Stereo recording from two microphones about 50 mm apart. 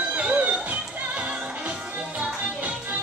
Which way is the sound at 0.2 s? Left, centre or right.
Right.